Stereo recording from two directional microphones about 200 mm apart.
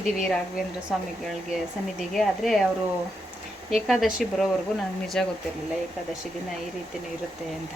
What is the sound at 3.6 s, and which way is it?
A woman's voice, centre (ahead or behind).